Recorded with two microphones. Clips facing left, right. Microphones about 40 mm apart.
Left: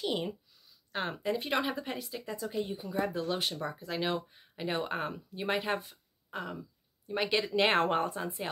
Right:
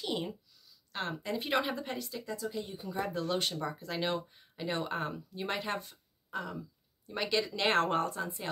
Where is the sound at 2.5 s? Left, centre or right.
Left.